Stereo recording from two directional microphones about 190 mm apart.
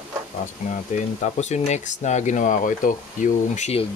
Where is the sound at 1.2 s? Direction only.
35° left (ahead or behind).